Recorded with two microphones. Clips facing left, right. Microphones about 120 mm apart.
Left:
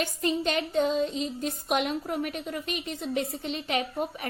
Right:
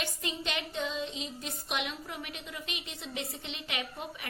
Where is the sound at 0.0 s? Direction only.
45° left (ahead or behind).